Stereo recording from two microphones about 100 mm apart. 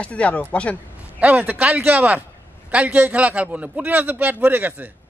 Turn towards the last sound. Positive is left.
turn(degrees=-20)  # may be behind; listen again after turning